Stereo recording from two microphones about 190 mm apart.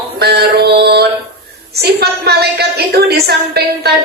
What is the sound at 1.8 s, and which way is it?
A woman's voice, 55° right (ahead or behind).